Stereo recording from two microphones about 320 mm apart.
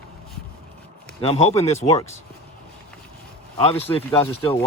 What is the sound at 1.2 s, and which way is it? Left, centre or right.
Speech, centre.